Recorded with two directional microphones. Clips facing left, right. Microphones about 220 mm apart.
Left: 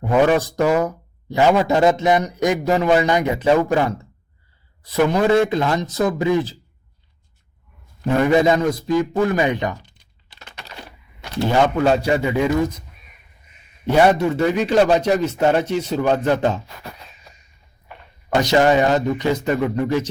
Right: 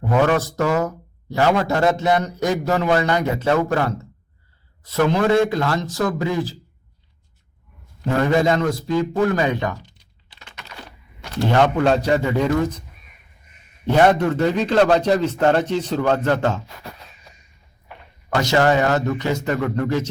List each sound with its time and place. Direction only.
0.3 s a man's voice: 15° left (ahead or behind)
8.0 s speech: 15° left (ahead or behind)
9.8 s typing: 55° left (ahead or behind)
11.5 s speech: 5° left (ahead or behind)
13.9 s speech: 10° left (ahead or behind)
18.3 s a man's voice: 20° left (ahead or behind)